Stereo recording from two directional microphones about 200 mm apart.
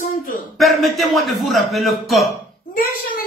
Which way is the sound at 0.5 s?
Centre (ahead or behind).